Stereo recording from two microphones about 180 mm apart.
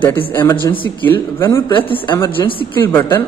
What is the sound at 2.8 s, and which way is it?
Mantra, 15° left (ahead or behind).